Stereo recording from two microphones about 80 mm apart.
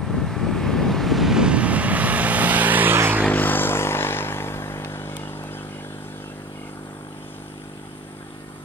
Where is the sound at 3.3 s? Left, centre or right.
Left.